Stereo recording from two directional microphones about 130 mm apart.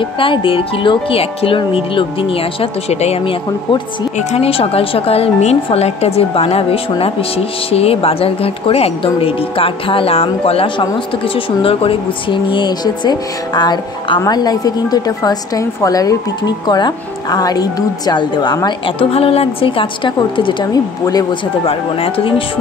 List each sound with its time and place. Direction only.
0.0 s a woman's voice: 40° left (ahead or behind)
21.6 s a woman's voice: 45° left (ahead or behind)